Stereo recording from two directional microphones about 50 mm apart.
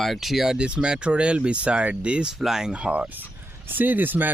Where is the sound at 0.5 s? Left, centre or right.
Centre.